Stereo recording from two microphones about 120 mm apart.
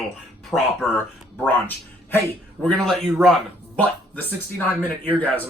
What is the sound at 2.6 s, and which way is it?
Speech, 5° left (ahead or behind).